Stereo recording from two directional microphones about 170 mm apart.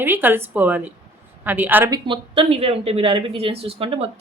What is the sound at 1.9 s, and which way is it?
Speech, 30° right (ahead or behind).